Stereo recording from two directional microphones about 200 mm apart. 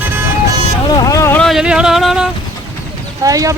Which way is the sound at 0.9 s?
15° left (ahead or behind).